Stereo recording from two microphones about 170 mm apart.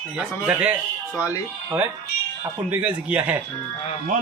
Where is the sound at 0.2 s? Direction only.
5° right (ahead or behind).